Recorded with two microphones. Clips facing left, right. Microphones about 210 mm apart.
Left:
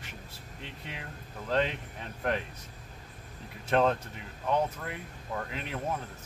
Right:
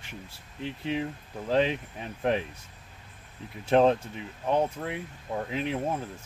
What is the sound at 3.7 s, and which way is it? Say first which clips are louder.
Speech: right 5 dB; 25° right (ahead or behind).